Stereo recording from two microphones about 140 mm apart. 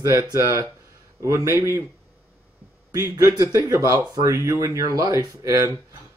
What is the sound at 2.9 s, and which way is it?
Speech, 20° right (ahead or behind).